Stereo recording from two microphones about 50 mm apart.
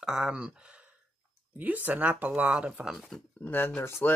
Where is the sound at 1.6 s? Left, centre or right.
Right.